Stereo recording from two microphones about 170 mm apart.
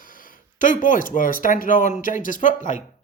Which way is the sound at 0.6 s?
50° left (ahead or behind).